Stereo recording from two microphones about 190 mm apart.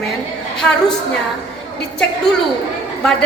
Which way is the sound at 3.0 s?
5° left (ahead or behind).